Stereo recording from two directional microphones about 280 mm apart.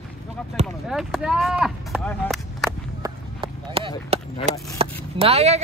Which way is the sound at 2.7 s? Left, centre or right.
Centre.